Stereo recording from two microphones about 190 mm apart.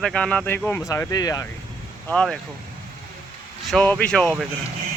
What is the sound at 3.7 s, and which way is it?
Speech, 5° left (ahead or behind).